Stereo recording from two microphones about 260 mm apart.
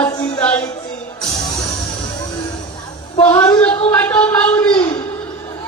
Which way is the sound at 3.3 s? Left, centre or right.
Centre.